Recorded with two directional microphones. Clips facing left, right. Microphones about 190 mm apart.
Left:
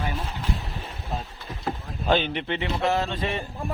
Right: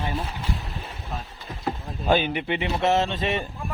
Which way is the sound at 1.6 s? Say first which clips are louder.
Right 1 dB; 10° right (ahead or behind).